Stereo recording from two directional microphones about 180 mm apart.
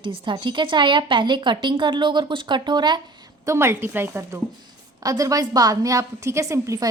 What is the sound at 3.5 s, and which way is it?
A woman's voice, 15° right (ahead or behind).